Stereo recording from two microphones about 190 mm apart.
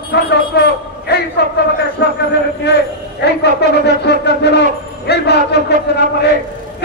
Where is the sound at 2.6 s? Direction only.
60° left (ahead or behind).